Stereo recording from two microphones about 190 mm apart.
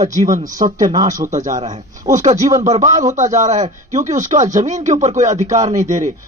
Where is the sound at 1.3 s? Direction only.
40° right (ahead or behind).